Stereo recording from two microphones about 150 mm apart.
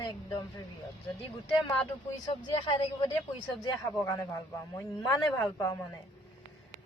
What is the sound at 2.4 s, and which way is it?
Speech, 30° left (ahead or behind).